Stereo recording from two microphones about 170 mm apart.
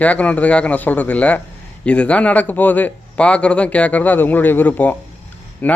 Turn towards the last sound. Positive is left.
turn(degrees=10)  # may be behind; listen again after turning